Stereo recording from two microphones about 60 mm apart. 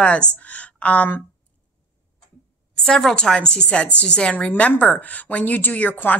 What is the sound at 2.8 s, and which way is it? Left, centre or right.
Speech, centre.